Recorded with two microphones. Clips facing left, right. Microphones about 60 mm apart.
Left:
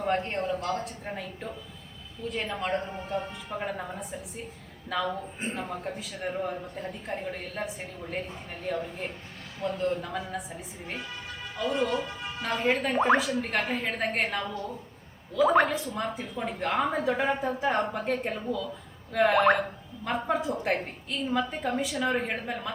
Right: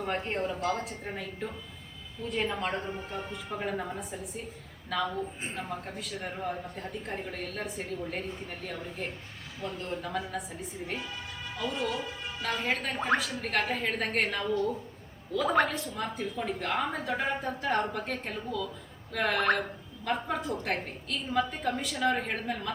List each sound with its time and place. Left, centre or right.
0.0 s a woman's voice: centre